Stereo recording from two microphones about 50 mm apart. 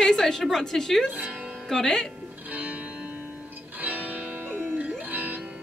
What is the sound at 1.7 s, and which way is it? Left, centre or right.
Speech, centre.